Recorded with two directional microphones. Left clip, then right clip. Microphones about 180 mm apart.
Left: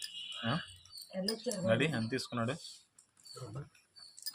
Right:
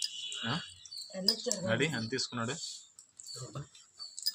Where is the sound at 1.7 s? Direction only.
65° left (ahead or behind).